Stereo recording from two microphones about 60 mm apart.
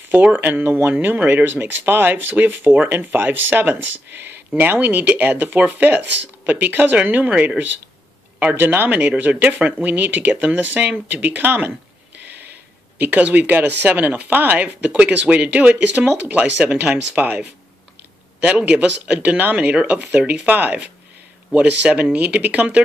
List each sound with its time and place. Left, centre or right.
0.1 s speech: right
8.5 s speech: right
12.3 s a sound: right
13.0 s speech: right